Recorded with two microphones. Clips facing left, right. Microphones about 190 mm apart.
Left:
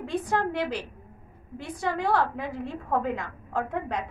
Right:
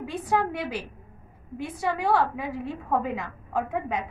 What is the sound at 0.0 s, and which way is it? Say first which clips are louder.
A woman's voice: right 1 dB; 5° right (ahead or behind).